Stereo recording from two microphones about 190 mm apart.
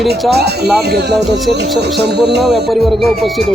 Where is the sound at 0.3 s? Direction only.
60° right (ahead or behind).